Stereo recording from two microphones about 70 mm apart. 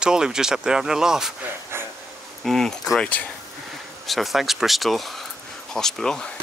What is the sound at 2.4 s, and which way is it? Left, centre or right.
Speech, centre.